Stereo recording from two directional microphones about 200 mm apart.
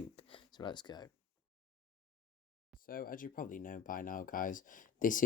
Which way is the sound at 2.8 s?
45° left (ahead or behind).